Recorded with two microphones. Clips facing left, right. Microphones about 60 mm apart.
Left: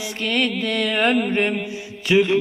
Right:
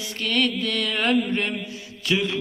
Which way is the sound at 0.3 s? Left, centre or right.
Left.